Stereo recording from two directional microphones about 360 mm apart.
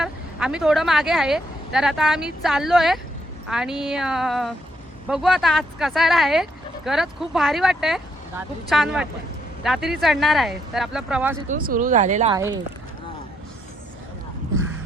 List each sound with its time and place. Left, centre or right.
0.0 s speech: centre
11.4 s speech: right